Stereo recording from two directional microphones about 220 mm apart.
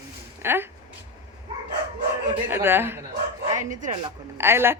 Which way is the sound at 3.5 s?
35° right (ahead or behind).